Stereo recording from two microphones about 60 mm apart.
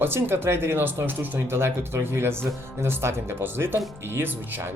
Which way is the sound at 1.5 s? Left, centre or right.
Right.